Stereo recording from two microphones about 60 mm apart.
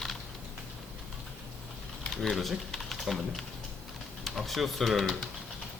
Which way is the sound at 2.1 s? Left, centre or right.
Centre.